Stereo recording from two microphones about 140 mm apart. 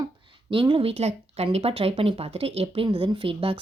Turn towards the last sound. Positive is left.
turn(degrees=-40)  # may be behind; listen again after turning